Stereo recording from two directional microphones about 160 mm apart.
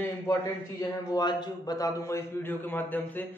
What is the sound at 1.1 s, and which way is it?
A man's voice, 25° left (ahead or behind).